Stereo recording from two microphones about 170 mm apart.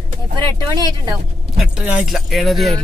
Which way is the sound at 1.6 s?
5° right (ahead or behind).